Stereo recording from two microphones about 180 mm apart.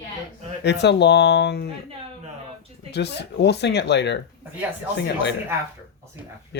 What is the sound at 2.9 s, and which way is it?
Speech, 70° left (ahead or behind).